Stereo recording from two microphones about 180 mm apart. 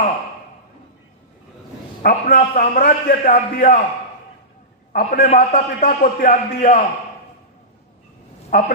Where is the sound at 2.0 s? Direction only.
55° left (ahead or behind).